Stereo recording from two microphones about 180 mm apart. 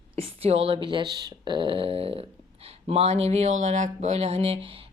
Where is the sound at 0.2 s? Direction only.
35° right (ahead or behind).